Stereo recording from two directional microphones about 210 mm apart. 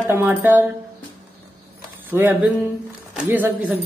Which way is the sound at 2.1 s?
10° right (ahead or behind).